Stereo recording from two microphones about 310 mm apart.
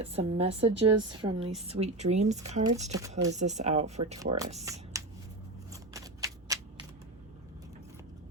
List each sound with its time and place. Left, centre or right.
0.0 s a woman's voice: centre
3.1 s a woman's voice: centre
3.3 s speech: right
5.7 s a sound: centre